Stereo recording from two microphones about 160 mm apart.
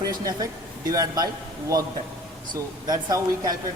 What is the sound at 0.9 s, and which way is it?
Speech, 25° right (ahead or behind).